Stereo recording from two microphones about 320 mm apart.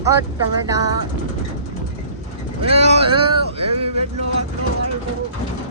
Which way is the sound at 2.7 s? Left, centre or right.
Centre.